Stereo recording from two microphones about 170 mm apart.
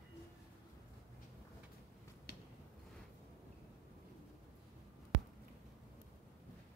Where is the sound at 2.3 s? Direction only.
65° left (ahead or behind).